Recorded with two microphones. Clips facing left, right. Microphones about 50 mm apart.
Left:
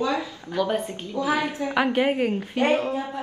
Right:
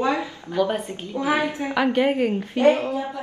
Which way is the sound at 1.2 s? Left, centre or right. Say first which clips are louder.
Right 2 dB; right.